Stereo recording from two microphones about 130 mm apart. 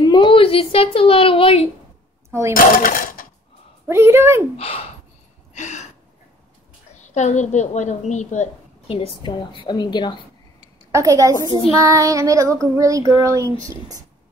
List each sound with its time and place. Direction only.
0.0 s a sound: 35° left (ahead or behind)
0.9 s speech: 45° left (ahead or behind)
2.5 s speech: 90° left
3.9 s child singing: 20° right (ahead or behind)
4.6 s speech: 50° left (ahead or behind)
5.5 s a sound: 65° left (ahead or behind)
7.0 s a woman's voice: 65° left (ahead or behind)
8.8 s a woman's voice: 45° left (ahead or behind)
10.9 s child singing: 25° right (ahead or behind)